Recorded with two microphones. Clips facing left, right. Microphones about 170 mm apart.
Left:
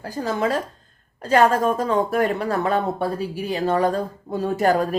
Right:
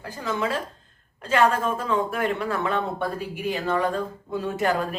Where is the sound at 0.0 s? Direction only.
40° left (ahead or behind).